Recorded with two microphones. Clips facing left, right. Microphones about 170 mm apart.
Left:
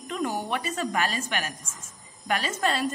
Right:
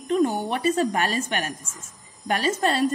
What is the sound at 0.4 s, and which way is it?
A woman's voice, 35° right (ahead or behind).